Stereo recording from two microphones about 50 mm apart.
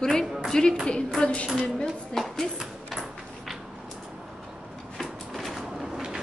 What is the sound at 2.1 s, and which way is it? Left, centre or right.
Speech, centre.